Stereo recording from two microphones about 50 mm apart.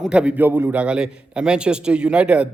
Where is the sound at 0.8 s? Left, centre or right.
Centre.